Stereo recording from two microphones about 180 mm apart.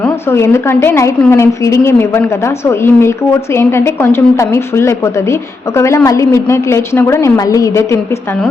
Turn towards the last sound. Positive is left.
turn(degrees=15)  # may be behind; listen again after turning